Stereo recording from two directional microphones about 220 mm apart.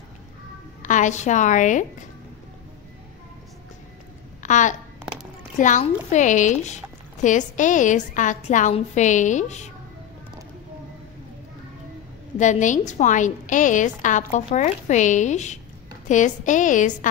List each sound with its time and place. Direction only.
0.8 s speech: 35° left (ahead or behind)
4.4 s a woman's voice: 35° left (ahead or behind)
12.4 s speech: 35° left (ahead or behind)